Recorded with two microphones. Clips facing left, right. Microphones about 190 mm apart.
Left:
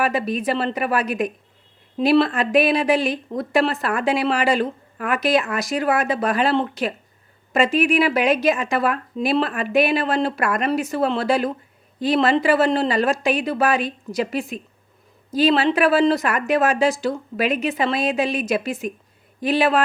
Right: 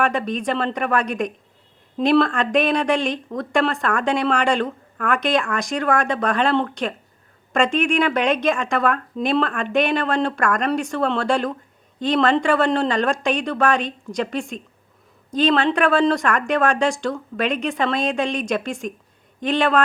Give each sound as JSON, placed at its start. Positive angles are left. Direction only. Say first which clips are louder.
{"t": 0.0, "sound": "speech", "louder": "even", "side_deg": 5}